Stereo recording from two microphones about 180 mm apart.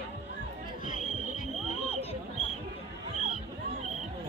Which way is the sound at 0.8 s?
45° left (ahead or behind).